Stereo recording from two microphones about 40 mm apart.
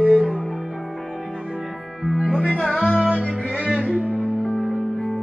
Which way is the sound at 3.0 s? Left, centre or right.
Right.